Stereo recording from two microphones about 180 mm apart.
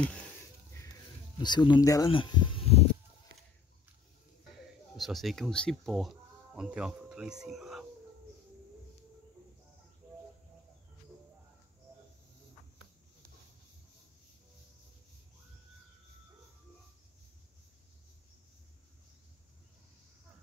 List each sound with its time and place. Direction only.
1.4 s speech: 25° left (ahead or behind)
4.9 s speech: centre (ahead or behind)